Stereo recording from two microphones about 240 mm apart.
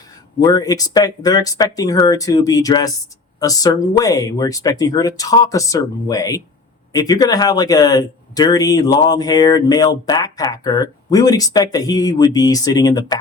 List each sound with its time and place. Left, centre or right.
0.3 s speech: centre